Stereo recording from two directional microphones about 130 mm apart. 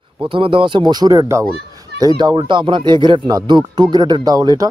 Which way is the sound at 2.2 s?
35° right (ahead or behind).